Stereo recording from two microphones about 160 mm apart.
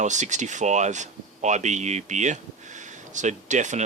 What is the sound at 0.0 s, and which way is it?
Speech, 50° right (ahead or behind).